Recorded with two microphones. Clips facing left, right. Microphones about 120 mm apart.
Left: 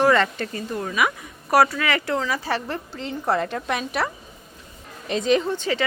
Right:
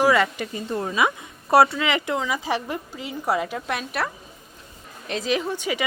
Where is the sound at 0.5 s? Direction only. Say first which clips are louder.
Right 1 dB; 25° right (ahead or behind).